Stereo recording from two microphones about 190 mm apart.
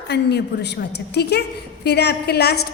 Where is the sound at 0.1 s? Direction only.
60° left (ahead or behind).